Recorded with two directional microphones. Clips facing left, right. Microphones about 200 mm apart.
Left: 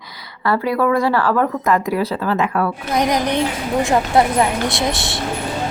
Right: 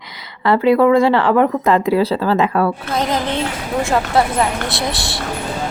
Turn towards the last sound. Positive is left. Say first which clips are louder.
# left 1 dB
turn(degrees=20)  # may be behind; listen again after turning